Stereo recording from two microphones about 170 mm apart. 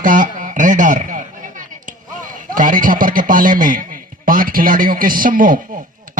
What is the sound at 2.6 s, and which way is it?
A man's voice, 50° right (ahead or behind).